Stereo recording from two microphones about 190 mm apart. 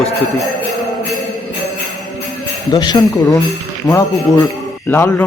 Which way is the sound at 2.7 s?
20° left (ahead or behind).